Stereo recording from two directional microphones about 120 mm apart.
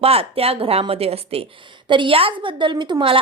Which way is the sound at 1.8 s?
45° right (ahead or behind).